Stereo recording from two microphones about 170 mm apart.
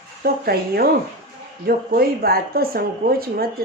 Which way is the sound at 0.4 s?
60° right (ahead or behind).